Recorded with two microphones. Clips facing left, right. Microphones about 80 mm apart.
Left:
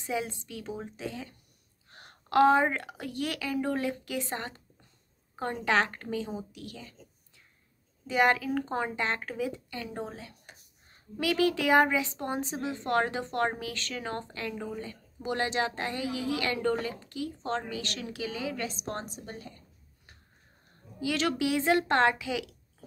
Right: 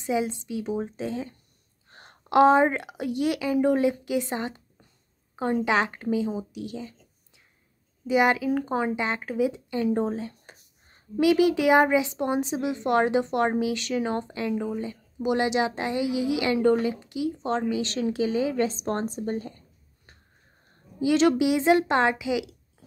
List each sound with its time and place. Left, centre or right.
0.0 s a woman's voice: centre
0.9 s speech: right
1.9 s a sound: right
2.2 s a woman's voice: centre
8.1 s a woman's voice: centre
9.7 s a sound: right
11.1 s a woman's voice: centre
17.9 s speech: right
21.0 s a woman's voice: right